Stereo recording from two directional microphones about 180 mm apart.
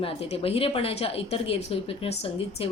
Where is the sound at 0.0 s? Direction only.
30° left (ahead or behind).